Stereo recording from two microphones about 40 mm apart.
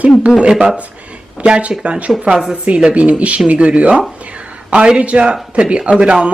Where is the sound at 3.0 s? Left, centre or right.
Right.